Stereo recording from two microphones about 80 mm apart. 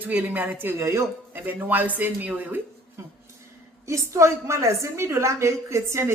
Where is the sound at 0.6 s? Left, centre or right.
Right.